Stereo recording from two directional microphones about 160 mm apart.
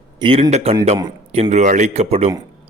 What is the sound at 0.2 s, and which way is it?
Speech, 35° right (ahead or behind).